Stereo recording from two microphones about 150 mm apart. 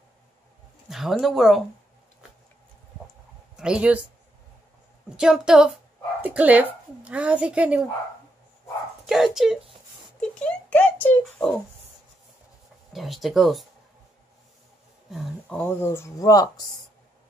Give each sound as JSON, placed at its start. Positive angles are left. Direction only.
{"t": 0.8, "sound": "speech", "side_deg": 0}
{"t": 3.5, "sound": "speech", "side_deg": -5}
{"t": 5.1, "sound": "speech", "side_deg": -5}
{"t": 9.0, "sound": "speech", "side_deg": 0}
{"t": 10.4, "sound": "a child's voice", "side_deg": 10}
{"t": 12.9, "sound": "speech", "side_deg": 0}
{"t": 15.0, "sound": "speech", "side_deg": 0}
{"t": 15.4, "sound": "speech", "side_deg": 10}